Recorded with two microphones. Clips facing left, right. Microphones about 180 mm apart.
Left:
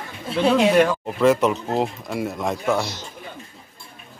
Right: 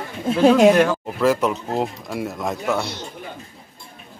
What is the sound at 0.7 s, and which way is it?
Speech, centre (ahead or behind).